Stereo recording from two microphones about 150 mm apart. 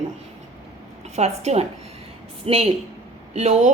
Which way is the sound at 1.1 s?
45° right (ahead or behind).